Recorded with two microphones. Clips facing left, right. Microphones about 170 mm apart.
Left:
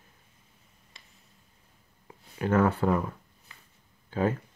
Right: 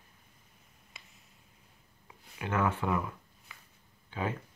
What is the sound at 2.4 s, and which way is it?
Speech, 40° left (ahead or behind).